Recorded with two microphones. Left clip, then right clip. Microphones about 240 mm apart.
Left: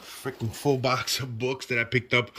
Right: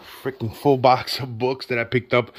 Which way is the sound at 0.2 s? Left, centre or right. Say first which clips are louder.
Right 7 dB; centre.